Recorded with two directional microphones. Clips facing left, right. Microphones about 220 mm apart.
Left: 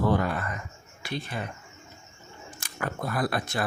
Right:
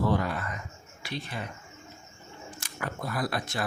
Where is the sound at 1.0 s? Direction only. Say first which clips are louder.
Left 3 dB; 50° left (ahead or behind).